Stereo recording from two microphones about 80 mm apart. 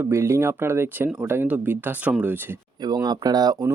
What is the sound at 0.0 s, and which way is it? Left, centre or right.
Speech, right.